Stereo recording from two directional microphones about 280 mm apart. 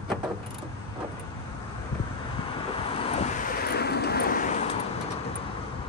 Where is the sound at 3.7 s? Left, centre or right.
Left.